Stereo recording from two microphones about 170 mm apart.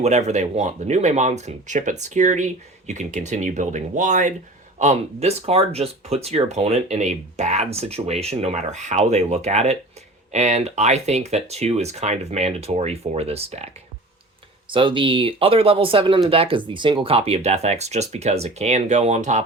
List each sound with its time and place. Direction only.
0.0 s speech: 40° right (ahead or behind)
14.7 s speech: 30° right (ahead or behind)